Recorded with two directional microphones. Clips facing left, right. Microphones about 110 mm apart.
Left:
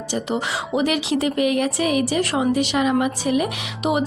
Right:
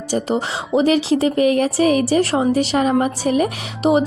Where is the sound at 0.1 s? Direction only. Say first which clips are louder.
Right 4 dB; 35° right (ahead or behind).